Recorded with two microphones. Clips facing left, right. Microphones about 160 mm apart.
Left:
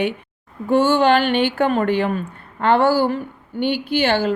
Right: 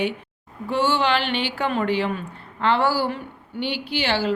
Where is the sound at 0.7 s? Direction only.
45° left (ahead or behind).